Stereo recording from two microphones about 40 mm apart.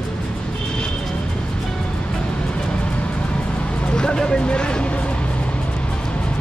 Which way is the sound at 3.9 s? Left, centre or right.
Left.